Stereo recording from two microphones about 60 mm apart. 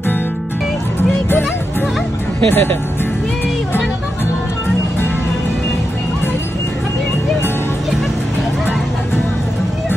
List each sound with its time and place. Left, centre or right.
2.5 s speech: left